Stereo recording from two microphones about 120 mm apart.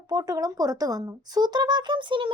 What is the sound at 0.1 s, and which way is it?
Speech, 30° right (ahead or behind).